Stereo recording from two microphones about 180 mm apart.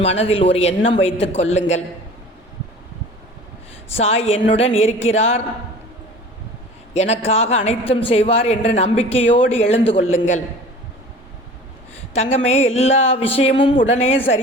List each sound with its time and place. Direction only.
0.0 s a man's voice: 35° left (ahead or behind)
3.9 s a man's voice: 35° left (ahead or behind)
6.9 s a man's voice: 40° left (ahead or behind)
12.1 s a man's voice: 35° left (ahead or behind)